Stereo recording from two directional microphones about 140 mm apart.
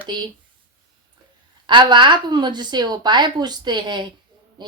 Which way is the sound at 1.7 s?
35° right (ahead or behind).